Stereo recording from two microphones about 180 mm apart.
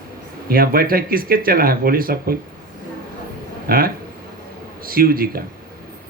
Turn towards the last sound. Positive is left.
turn(degrees=-55)  # may be behind; listen again after turning